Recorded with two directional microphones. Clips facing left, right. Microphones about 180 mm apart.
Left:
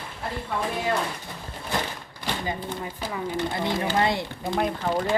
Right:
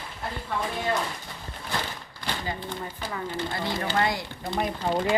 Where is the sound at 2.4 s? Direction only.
15° left (ahead or behind).